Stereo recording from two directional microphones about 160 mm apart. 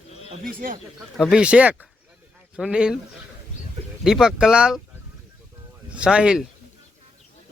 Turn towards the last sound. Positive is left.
turn(degrees=-5)  # may be behind; listen again after turning